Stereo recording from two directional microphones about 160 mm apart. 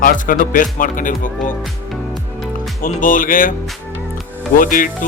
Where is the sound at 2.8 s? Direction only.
55° left (ahead or behind).